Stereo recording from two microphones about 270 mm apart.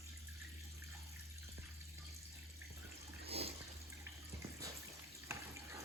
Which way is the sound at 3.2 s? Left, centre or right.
Right.